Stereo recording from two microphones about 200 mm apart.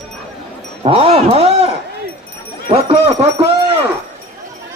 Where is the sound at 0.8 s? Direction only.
30° right (ahead or behind).